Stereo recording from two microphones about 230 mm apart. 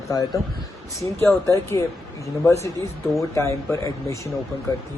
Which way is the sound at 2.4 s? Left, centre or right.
Centre.